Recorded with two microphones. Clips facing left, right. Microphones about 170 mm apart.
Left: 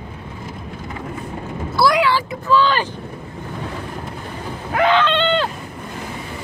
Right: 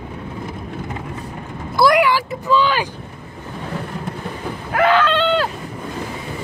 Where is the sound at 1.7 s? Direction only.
15° right (ahead or behind).